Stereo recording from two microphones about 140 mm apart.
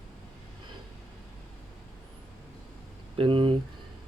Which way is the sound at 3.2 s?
40° right (ahead or behind).